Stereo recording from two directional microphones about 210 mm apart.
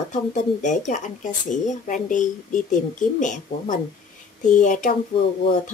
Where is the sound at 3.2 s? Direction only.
35° left (ahead or behind).